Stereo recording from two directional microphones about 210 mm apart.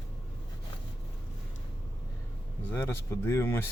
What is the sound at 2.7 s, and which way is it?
Speech, 10° left (ahead or behind).